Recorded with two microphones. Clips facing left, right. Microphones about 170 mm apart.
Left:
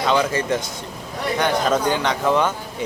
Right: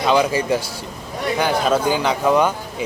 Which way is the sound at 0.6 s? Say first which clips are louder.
Right 1 dB; 30° right (ahead or behind).